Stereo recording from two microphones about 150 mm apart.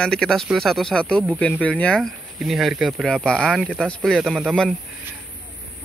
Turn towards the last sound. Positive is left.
turn(degrees=0)  # may be behind; listen again after turning